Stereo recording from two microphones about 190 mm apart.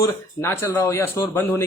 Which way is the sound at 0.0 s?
15° left (ahead or behind).